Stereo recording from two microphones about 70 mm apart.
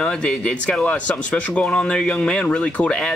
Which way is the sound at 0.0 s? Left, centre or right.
Centre.